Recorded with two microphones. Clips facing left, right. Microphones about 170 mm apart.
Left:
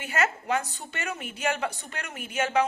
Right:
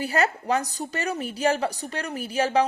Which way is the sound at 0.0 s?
35° right (ahead or behind).